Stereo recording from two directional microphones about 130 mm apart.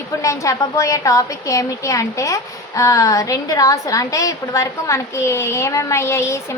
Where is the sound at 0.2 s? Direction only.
25° left (ahead or behind).